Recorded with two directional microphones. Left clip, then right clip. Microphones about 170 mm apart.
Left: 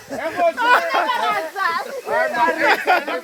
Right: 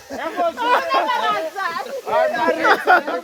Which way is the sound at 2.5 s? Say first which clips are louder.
Right 3 dB; 50° right (ahead or behind).